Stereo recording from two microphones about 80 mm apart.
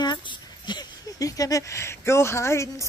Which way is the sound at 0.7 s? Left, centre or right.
Left.